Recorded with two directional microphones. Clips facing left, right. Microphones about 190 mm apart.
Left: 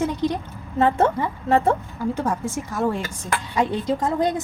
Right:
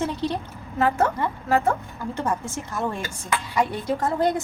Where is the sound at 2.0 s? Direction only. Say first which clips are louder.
Left 3 dB; 10° left (ahead or behind).